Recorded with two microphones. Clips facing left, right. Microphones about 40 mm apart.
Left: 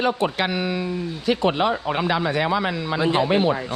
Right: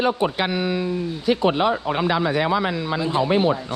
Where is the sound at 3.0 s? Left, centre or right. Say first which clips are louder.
Left 3 dB; left.